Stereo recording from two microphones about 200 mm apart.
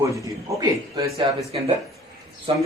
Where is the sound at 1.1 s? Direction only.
25° right (ahead or behind).